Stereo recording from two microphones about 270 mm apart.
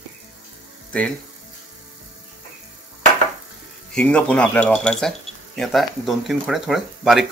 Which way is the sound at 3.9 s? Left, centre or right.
Centre.